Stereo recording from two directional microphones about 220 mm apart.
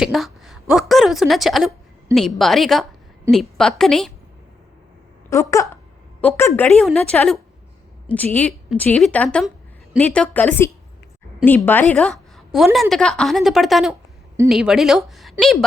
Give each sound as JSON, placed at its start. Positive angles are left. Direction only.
{"t": 0.0, "sound": "a woman's voice", "side_deg": 0}
{"t": 5.3, "sound": "a woman's voice", "side_deg": 15}